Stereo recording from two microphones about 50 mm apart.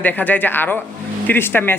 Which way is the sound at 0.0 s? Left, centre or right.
Left.